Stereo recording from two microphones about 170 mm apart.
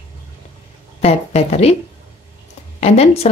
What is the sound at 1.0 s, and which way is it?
Speech, 40° left (ahead or behind).